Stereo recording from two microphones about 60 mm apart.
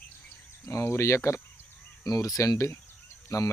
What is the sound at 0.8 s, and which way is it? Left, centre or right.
Speech, left.